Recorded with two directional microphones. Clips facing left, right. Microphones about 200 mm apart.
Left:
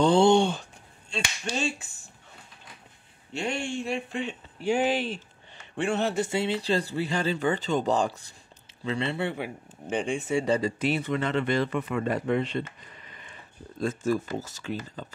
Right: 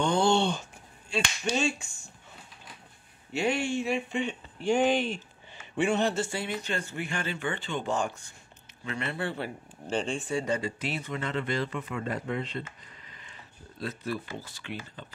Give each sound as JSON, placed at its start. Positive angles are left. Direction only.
{"t": 0.0, "sound": "speech", "side_deg": 30}
{"t": 0.3, "sound": "a sound", "side_deg": 10}
{"t": 1.1, "sound": "speech", "side_deg": -5}
{"t": 3.3, "sound": "speech", "side_deg": -5}
{"t": 6.1, "sound": "speech", "side_deg": 20}
{"t": 10.4, "sound": "speech", "side_deg": 35}
{"t": 10.8, "sound": "a man's voice", "side_deg": 60}
{"t": 13.7, "sound": "speech", "side_deg": 45}